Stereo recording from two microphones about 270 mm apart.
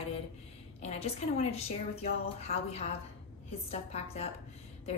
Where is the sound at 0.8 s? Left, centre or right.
Left.